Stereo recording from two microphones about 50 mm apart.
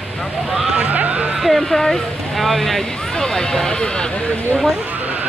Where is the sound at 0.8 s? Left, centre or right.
Right.